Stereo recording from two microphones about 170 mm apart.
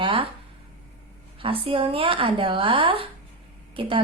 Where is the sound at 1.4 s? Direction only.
35° right (ahead or behind).